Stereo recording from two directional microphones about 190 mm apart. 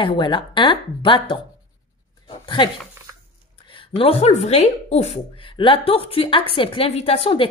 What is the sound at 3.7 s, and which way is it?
A woman's voice, 30° left (ahead or behind).